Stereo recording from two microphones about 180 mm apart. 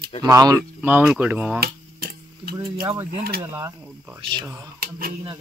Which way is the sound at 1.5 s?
60° right (ahead or behind).